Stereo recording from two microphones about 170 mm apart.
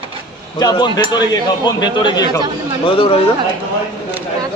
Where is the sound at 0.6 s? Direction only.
25° left (ahead or behind).